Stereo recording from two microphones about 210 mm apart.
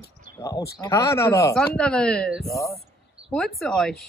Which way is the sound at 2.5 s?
15° left (ahead or behind).